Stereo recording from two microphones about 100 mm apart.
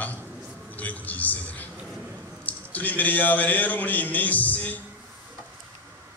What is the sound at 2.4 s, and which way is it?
A man's voice, 15° left (ahead or behind).